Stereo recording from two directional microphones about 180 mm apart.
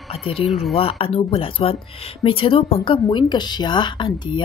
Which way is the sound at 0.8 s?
30° left (ahead or behind).